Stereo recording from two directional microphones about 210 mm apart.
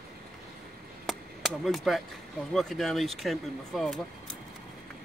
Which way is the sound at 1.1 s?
Centre (ahead or behind).